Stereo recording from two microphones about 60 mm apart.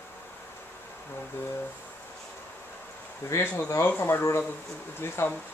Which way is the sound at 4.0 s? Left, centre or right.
Left.